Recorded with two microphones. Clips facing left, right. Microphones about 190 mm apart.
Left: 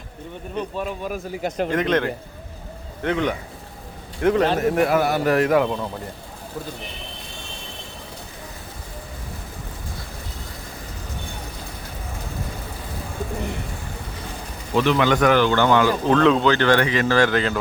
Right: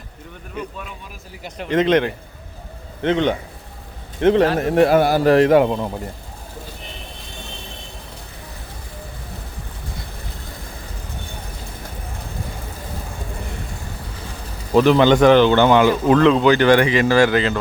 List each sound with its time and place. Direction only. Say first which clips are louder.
0.8 s speech: left 9 dB; 50° left (ahead or behind)
1.7 s speech: right 7 dB; 20° right (ahead or behind)
14.8 s speech: right 6 dB; 35° right (ahead or behind); by 16.1 s 20° right (ahead or behind)
16.1 s speech: right 2 dB; 5° right (ahead or behind)